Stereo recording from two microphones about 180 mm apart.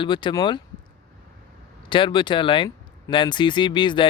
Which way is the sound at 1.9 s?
25° left (ahead or behind).